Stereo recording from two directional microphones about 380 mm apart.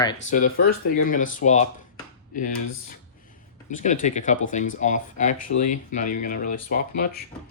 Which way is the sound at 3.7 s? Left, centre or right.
Centre.